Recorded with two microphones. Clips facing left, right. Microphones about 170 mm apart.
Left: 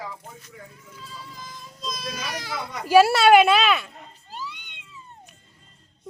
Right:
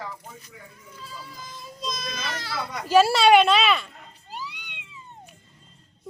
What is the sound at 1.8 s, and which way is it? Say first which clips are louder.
Speech: even; 5° left (ahead or behind).